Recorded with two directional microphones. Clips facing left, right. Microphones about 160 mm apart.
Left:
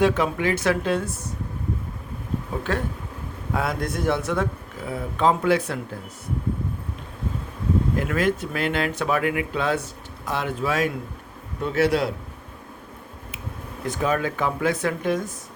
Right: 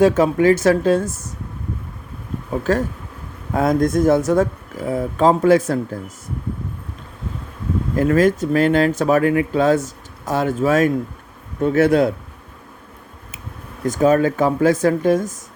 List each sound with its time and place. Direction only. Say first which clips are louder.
0.0 s speech: right 7 dB; 40° right (ahead or behind)
2.7 s speech: right 8 dB; 40° right (ahead or behind)
7.9 s speech: right 8 dB; 40° right (ahead or behind)
13.8 s speech: right 9 dB; 45° right (ahead or behind)